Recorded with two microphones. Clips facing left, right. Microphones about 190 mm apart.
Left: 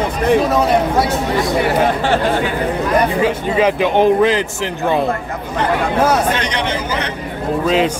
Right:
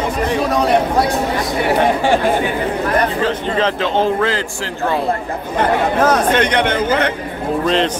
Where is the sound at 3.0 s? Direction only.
10° left (ahead or behind).